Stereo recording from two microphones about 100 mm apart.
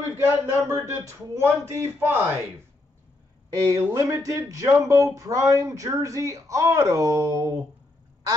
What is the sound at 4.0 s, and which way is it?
Speech, 30° right (ahead or behind).